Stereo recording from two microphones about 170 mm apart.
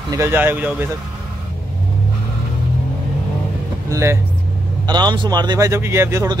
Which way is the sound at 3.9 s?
15° right (ahead or behind).